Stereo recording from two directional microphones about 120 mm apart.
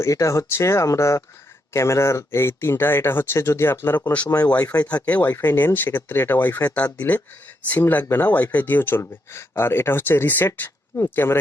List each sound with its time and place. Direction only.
0.0 s speech: 25° left (ahead or behind)